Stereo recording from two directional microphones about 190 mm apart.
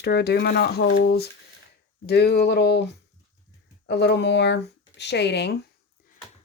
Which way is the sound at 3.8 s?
60° left (ahead or behind).